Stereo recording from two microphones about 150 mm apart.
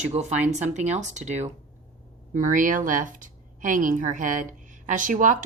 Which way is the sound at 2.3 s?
60° right (ahead or behind).